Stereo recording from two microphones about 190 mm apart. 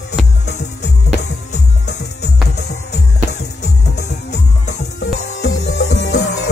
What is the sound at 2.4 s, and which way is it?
Music, 60° left (ahead or behind).